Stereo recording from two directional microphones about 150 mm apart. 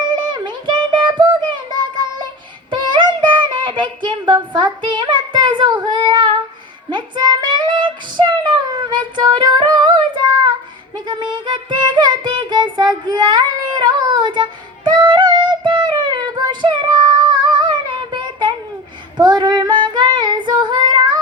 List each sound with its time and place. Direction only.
0.3 s child singing: 30° right (ahead or behind)
2.6 s music: 30° right (ahead or behind)
6.9 s a sound: 30° right (ahead or behind)
8.9 s female singing: 30° right (ahead or behind)
10.9 s child singing: 30° right (ahead or behind)
14.8 s female singing: 30° right (ahead or behind)